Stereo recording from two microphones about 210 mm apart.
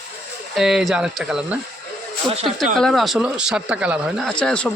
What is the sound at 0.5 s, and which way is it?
A man's voice, centre (ahead or behind).